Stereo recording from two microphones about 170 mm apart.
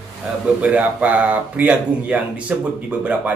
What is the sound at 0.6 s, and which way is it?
Speech, 10° right (ahead or behind).